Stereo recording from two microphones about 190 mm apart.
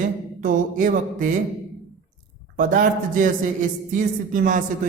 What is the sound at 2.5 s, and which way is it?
Speech, 45° right (ahead or behind).